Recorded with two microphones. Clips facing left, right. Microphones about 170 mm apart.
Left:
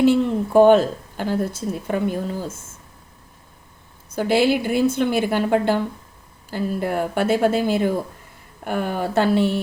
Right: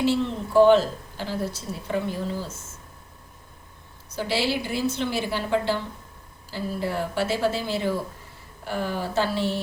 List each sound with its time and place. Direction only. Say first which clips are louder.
0.0 s a woman's voice: left 7 dB; 50° left (ahead or behind)
4.1 s a woman's voice: left 8 dB; 55° left (ahead or behind)